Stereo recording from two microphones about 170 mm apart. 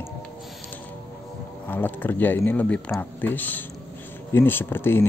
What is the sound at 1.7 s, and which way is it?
Speech, 10° left (ahead or behind).